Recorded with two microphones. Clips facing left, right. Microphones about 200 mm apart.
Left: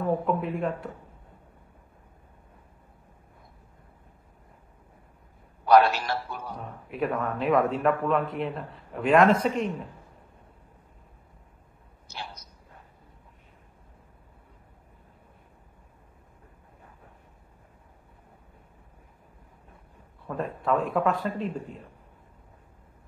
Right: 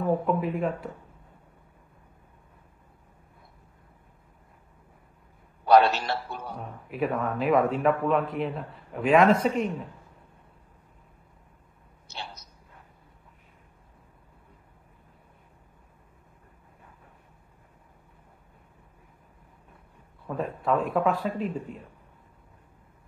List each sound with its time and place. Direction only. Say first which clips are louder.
0.1 s speech: right 2 dB; centre (ahead or behind)
5.7 s a man's voice: even; 25° right (ahead or behind)
6.5 s speech: even; centre (ahead or behind)
12.1 s a sound: even; 25° right (ahead or behind)
20.2 s speech: even; centre (ahead or behind)